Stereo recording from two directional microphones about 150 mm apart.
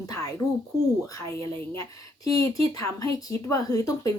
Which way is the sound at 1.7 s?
20° left (ahead or behind).